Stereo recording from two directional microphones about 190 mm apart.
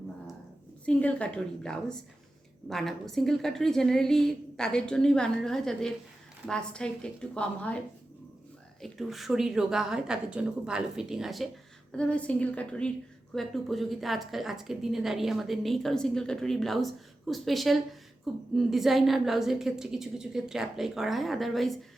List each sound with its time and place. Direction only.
0.9 s a woman's voice: 5° left (ahead or behind)
8.8 s a woman's voice: centre (ahead or behind)